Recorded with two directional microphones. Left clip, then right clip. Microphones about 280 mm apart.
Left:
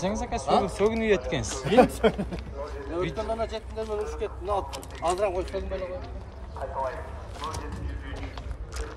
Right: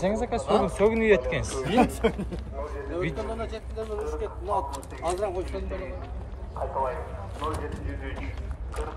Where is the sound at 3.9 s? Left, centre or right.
Left.